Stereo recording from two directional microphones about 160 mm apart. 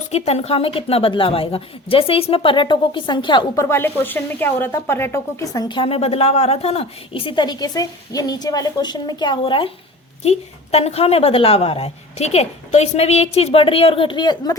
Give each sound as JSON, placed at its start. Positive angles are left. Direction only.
{"t": 0.1, "sound": "a woman's voice", "side_deg": 40}